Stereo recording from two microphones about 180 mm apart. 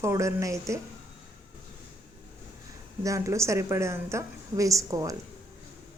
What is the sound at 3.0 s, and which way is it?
A woman's voice, 15° right (ahead or behind).